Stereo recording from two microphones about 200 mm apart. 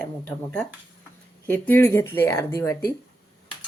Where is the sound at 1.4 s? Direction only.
10° left (ahead or behind).